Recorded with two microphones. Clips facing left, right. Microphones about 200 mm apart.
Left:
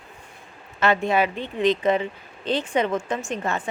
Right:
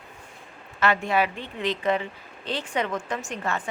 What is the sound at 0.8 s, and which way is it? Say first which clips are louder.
Speech: left 3 dB; 20° left (ahead or behind).